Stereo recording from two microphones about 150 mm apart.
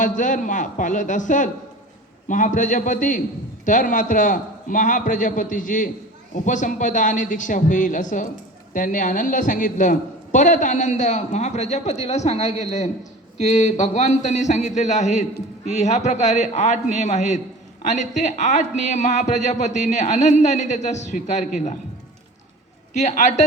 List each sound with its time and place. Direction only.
0.0 s a man's voice: 60° left (ahead or behind)
23.0 s a man's voice: 55° left (ahead or behind)